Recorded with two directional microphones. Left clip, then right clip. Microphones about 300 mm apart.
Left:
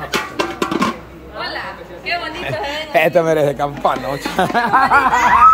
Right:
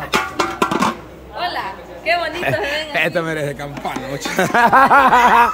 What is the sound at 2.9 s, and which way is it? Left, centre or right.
Speech, centre.